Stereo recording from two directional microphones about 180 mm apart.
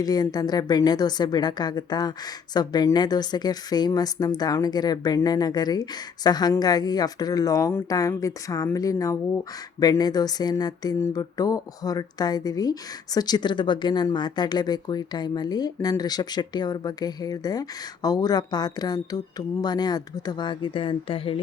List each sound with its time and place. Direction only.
0.0 s a woman's voice: 20° left (ahead or behind)